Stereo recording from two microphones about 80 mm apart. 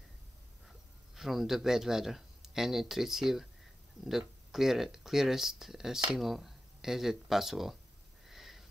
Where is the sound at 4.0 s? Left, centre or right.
Right.